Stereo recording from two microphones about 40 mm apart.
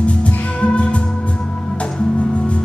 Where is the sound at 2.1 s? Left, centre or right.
Left.